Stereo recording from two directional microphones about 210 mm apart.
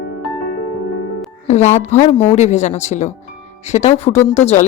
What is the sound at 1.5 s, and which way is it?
Speech, 30° left (ahead or behind).